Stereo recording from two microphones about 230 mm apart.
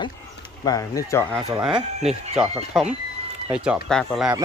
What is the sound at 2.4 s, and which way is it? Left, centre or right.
Speech, centre.